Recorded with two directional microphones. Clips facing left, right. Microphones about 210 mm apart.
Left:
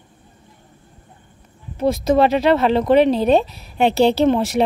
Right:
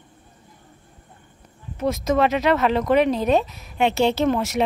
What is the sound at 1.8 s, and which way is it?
Speech, 30° left (ahead or behind).